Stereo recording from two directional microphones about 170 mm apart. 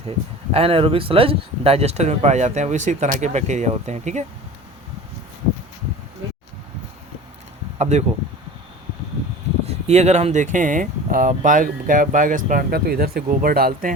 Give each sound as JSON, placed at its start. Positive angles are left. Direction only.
{"t": 0.5, "sound": "speech", "side_deg": -35}
{"t": 7.8, "sound": "speech", "side_deg": -40}
{"t": 9.6, "sound": "speech", "side_deg": -40}